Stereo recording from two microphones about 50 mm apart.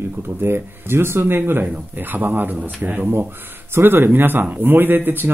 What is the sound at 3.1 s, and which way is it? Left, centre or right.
Speech, right.